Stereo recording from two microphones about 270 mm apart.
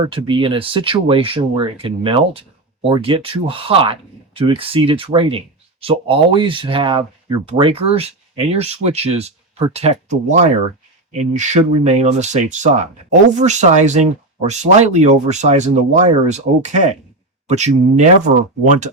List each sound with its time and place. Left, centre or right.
0.1 s speech: centre